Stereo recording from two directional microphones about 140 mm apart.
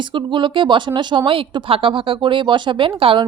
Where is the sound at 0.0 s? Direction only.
35° right (ahead or behind).